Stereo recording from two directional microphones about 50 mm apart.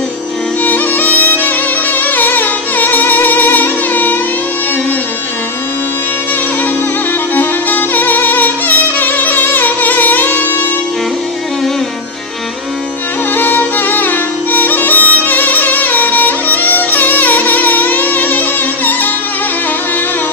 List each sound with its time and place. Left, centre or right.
0.7 s music: left
7.3 s music: left
13.3 s music: left